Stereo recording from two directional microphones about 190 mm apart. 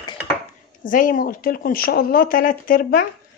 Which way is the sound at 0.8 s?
45° left (ahead or behind).